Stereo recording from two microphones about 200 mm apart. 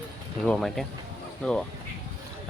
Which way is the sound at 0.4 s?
5° left (ahead or behind).